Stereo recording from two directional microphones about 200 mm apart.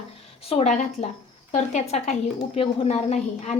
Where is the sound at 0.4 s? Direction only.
35° left (ahead or behind).